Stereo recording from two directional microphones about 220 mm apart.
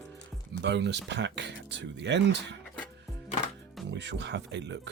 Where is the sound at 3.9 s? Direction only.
50° right (ahead or behind).